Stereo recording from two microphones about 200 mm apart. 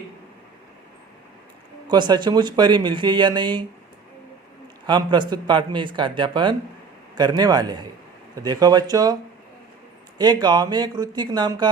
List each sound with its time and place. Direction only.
1.9 s speech: 20° right (ahead or behind)
4.9 s speech: 25° right (ahead or behind)
10.2 s speech: 20° right (ahead or behind)